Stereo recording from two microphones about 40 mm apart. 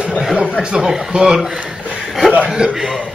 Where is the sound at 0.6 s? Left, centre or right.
Centre.